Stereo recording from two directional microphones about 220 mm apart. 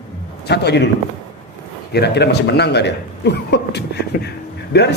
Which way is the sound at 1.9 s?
50° left (ahead or behind).